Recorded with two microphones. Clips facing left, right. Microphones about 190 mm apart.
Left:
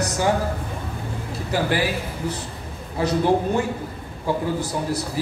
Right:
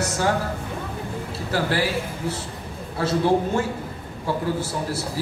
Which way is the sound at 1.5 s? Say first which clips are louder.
Left 1 dB; 15° left (ahead or behind).